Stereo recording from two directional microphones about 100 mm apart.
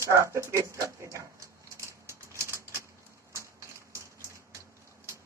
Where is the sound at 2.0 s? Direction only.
30° right (ahead or behind).